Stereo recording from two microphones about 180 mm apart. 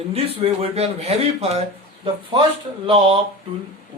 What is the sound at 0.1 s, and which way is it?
Speech, 35° right (ahead or behind).